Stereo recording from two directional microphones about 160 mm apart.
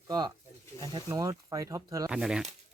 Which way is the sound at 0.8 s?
25° right (ahead or behind).